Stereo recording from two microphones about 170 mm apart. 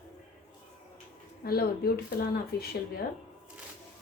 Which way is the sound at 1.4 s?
60° left (ahead or behind).